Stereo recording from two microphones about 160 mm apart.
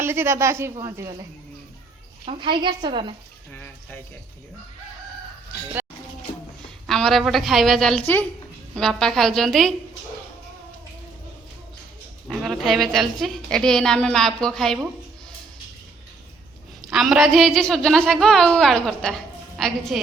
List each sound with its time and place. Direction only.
0.0 s a woman's voice: 15° right (ahead or behind)
2.2 s a woman's voice: 30° right (ahead or behind)
3.5 s speech: 10° left (ahead or behind)
5.8 s music: 15° right (ahead or behind)
6.8 s a woman's voice: centre (ahead or behind)
12.3 s a woman's voice: centre (ahead or behind)
16.8 s a woman's voice: centre (ahead or behind)